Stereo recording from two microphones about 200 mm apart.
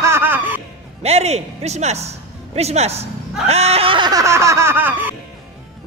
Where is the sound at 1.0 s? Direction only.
30° right (ahead or behind).